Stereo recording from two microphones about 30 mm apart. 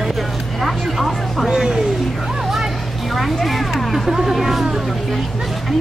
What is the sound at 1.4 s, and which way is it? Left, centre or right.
Speech, right.